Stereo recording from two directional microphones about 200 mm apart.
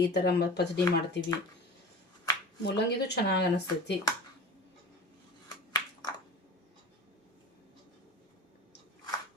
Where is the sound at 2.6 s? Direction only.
55° left (ahead or behind).